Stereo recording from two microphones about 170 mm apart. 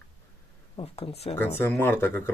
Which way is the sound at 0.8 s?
35° left (ahead or behind).